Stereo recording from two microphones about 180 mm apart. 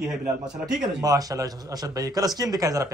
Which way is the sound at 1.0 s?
20° right (ahead or behind).